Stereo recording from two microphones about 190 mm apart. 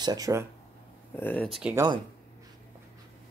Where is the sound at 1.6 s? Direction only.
5° right (ahead or behind).